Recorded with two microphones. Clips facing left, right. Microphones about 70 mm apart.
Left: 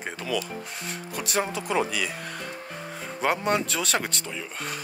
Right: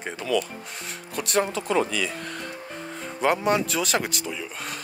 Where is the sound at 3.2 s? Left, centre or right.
Centre.